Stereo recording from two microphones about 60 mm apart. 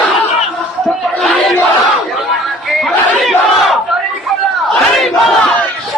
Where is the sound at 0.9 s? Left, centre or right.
Centre.